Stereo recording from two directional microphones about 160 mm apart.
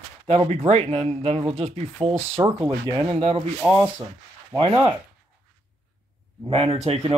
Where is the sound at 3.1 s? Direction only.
35° right (ahead or behind).